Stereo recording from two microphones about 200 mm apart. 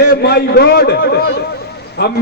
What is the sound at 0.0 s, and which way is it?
A man's voice, 55° left (ahead or behind).